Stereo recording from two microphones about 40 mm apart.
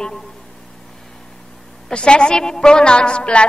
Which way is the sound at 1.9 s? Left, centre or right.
Left.